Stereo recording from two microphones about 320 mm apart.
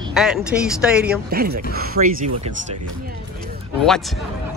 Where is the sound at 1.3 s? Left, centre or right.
Right.